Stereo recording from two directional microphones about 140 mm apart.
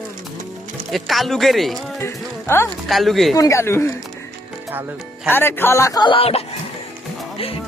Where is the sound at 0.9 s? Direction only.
Centre (ahead or behind).